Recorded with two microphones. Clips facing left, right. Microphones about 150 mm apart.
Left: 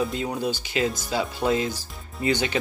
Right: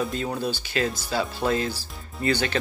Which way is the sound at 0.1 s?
20° left (ahead or behind).